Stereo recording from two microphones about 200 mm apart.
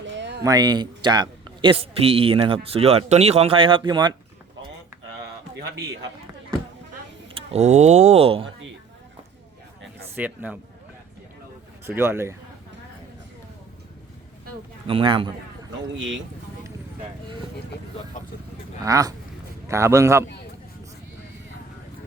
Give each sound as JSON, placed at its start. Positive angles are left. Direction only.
{"t": 0.0, "sound": "a sound", "side_deg": -60}
{"t": 0.4, "sound": "speech", "side_deg": -20}
{"t": 7.3, "sound": "speech", "side_deg": -35}
{"t": 10.2, "sound": "a man's voice", "side_deg": -10}
{"t": 11.9, "sound": "a man's voice", "side_deg": -10}
{"t": 14.8, "sound": "speech", "side_deg": -25}
{"t": 16.0, "sound": "speech", "side_deg": -70}
{"t": 18.8, "sound": "a man's voice", "side_deg": -15}